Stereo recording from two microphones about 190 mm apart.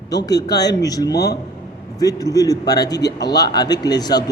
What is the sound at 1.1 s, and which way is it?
Speech, 60° left (ahead or behind).